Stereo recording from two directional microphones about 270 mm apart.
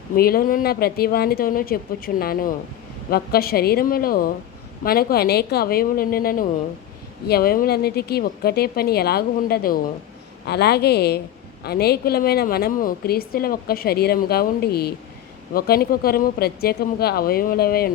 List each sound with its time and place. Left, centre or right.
0.2 s a woman's voice: left